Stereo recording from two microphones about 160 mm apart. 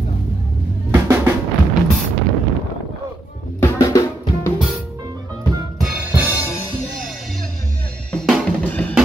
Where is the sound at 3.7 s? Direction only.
15° left (ahead or behind).